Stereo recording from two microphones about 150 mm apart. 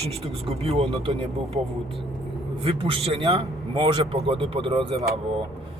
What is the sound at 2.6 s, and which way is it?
A man's voice, 35° right (ahead or behind).